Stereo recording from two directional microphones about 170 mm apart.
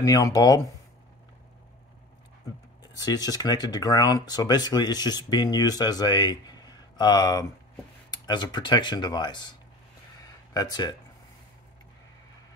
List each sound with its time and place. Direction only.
0.0 s speech: 20° left (ahead or behind)
3.0 s speech: 25° left (ahead or behind)